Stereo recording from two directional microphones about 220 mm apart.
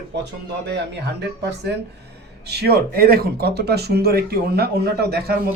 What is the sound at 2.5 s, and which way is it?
Speech, 45° right (ahead or behind).